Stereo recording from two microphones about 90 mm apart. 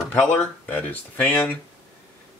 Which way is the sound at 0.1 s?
20° left (ahead or behind).